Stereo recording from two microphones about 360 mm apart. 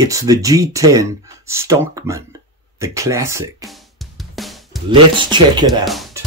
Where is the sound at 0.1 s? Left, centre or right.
Centre.